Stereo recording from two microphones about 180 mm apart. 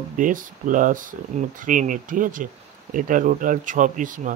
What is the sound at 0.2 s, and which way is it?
Speech, 45° right (ahead or behind).